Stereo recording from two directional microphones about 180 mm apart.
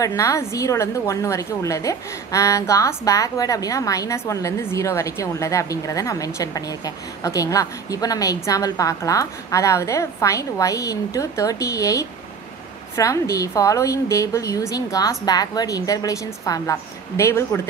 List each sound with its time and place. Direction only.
0.0 s a woman's voice: 15° left (ahead or behind)